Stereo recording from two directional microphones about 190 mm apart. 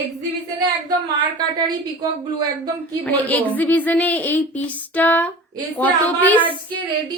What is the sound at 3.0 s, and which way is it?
A woman's voice, 10° left (ahead or behind).